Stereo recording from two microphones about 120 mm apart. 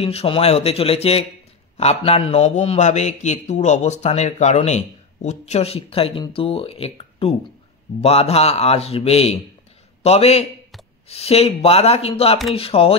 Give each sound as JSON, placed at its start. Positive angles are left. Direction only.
{"t": 0.0, "sound": "a man's voice", "side_deg": 55}